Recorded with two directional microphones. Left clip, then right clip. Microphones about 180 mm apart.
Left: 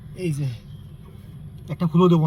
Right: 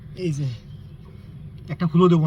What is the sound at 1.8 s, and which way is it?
Speech, 45° right (ahead or behind).